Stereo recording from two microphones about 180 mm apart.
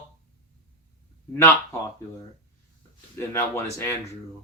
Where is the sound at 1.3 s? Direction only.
15° left (ahead or behind).